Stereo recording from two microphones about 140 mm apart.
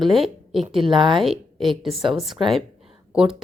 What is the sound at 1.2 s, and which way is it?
A woman's voice, centre (ahead or behind).